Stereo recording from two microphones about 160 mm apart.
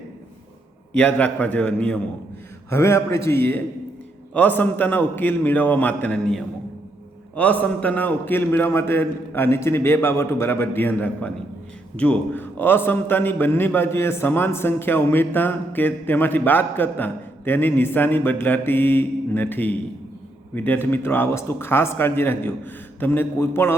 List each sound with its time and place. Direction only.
0.9 s a man's voice: 10° left (ahead or behind)